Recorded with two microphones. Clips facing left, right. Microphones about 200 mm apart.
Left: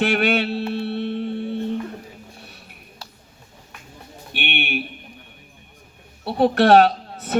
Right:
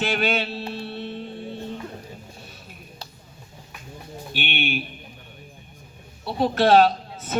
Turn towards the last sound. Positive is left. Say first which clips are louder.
# left 2 dB
turn(degrees=65)  # may be behind; listen again after turning